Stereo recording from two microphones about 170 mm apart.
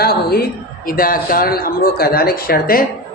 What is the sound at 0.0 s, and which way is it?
A woman's voice, 65° left (ahead or behind).